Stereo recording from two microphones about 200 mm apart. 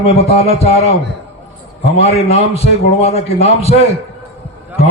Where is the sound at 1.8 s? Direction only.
30° left (ahead or behind).